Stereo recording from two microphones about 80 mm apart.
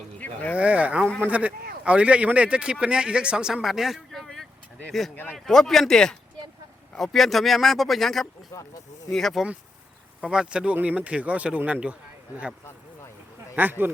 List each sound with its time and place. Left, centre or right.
0.5 s speech: centre
5.1 s a man's voice: left
5.5 s speech: centre
8.5 s speech: left
9.1 s speech: centre
10.2 s speech: centre
13.6 s speech: right